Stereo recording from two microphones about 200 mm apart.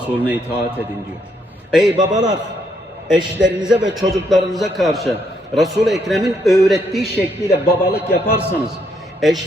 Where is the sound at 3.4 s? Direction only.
5° right (ahead or behind).